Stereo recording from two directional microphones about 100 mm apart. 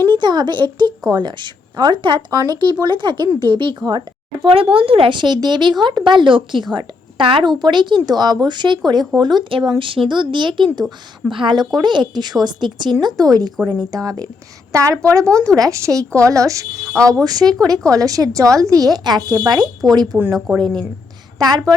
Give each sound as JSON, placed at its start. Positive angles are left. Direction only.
{"t": 0.1, "sound": "speech", "side_deg": -50}
{"t": 4.4, "sound": "a woman's voice", "side_deg": -60}
{"t": 15.2, "sound": "speech", "side_deg": 10}
{"t": 15.4, "sound": "a woman's voice", "side_deg": -35}
{"t": 16.7, "sound": "speech", "side_deg": 5}
{"t": 17.1, "sound": "a woman's voice", "side_deg": -35}